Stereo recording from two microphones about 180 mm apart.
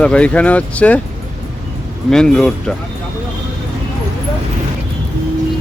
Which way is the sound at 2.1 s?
5° left (ahead or behind).